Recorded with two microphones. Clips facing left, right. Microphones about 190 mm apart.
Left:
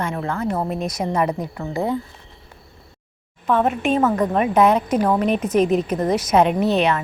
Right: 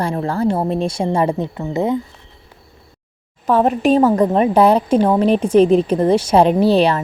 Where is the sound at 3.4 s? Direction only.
35° right (ahead or behind).